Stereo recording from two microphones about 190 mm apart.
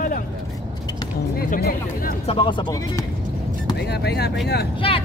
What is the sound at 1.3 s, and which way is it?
Speech, 50° left (ahead or behind).